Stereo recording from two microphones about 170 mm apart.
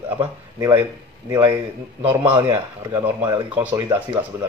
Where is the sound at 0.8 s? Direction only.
15° right (ahead or behind).